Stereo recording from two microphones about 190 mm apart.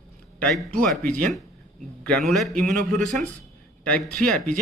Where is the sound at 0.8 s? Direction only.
5° left (ahead or behind).